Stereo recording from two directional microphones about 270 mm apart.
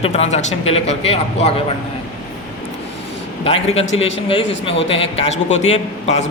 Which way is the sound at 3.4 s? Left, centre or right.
Left.